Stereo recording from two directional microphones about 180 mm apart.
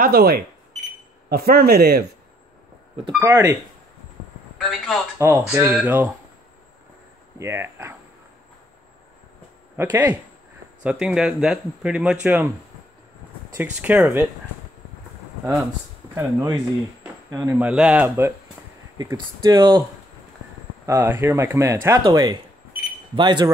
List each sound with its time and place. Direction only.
0.0 s speech: 60° right (ahead or behind)
3.2 s speech: 15° right (ahead or behind)
4.6 s speech: centre (ahead or behind)
5.2 s speech: 15° right (ahead or behind)
7.3 s speech: 15° right (ahead or behind)
9.8 s speech: 10° right (ahead or behind)
13.6 s speech: 10° right (ahead or behind)
16.2 s speech: 20° right (ahead or behind)
17.6 s speech: 5° right (ahead or behind); by 19.8 s 25° right (ahead or behind)
20.8 s speech: 15° right (ahead or behind)